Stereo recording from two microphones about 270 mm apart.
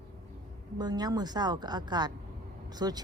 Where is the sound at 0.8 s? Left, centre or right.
Centre.